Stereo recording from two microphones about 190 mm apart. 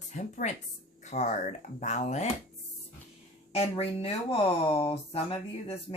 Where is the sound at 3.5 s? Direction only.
30° left (ahead or behind).